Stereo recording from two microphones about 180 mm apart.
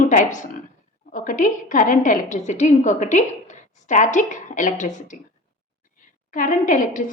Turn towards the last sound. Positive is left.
turn(degrees=45)  # may be behind; listen again after turning